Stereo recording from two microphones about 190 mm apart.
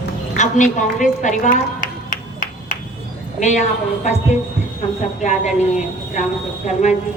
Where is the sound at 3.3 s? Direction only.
40° left (ahead or behind).